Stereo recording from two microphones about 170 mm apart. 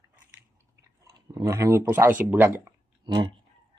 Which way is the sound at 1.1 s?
20° right (ahead or behind).